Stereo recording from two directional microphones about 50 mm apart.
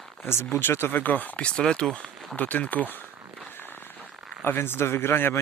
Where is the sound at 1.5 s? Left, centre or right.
Centre.